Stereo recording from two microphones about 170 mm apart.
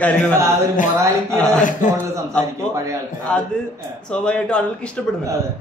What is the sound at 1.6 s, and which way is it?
Speech, 50° left (ahead or behind).